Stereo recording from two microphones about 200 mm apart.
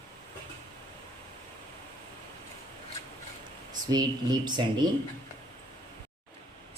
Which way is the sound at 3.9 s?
20° right (ahead or behind).